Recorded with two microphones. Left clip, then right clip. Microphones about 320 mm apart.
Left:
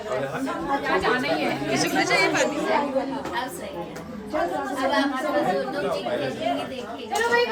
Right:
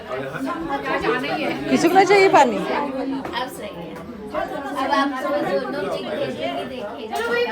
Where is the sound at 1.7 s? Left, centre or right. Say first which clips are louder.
Right 9 dB; centre.